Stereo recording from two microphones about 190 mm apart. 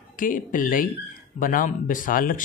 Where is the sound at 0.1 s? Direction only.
45° left (ahead or behind).